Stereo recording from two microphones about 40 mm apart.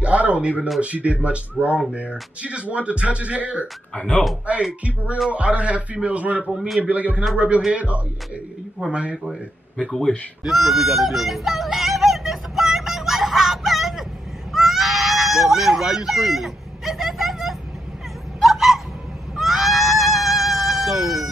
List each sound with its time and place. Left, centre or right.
0.0 s a sound: right
0.7 s speech: right
3.9 s speech: left
4.8 s speech: right
6.4 s a man's voice: right
6.8 s speech: right
10.4 s a sound: centre